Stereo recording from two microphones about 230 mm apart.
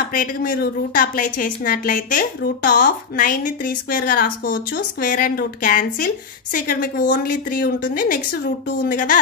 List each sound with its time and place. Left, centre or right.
0.1 s a woman's voice: left